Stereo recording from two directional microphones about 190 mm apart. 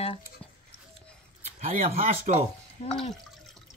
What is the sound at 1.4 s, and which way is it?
Speech, 35° right (ahead or behind).